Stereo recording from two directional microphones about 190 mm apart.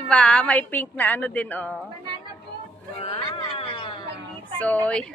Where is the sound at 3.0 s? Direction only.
30° left (ahead or behind).